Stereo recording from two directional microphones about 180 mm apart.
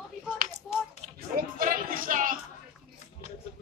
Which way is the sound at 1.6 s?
50° right (ahead or behind).